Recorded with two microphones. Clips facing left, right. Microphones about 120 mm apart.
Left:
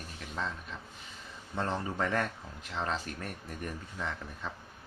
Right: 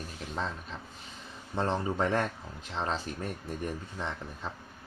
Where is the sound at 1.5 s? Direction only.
25° right (ahead or behind).